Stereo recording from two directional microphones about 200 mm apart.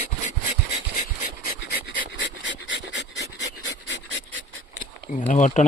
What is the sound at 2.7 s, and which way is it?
Pant, 65° left (ahead or behind).